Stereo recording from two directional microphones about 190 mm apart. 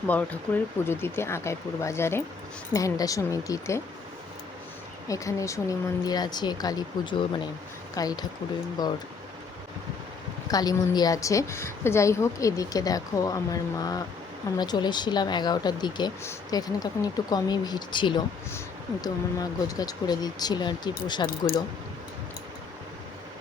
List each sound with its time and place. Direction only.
0.1 s a woman's voice: 10° left (ahead or behind)
5.0 s speech: 15° left (ahead or behind)
10.5 s a woman's voice: 20° left (ahead or behind)